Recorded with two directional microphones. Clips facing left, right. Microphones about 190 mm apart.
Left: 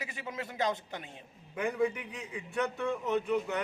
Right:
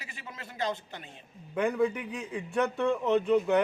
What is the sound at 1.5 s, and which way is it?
A man's voice, 60° right (ahead or behind).